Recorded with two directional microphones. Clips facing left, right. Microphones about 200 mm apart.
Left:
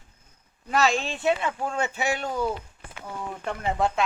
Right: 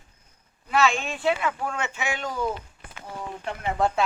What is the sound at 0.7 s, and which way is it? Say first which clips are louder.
Speech: even; 40° left (ahead or behind).